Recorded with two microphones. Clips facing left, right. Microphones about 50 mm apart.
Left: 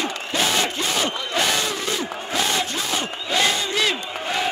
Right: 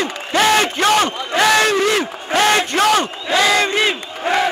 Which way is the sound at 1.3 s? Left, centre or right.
Right.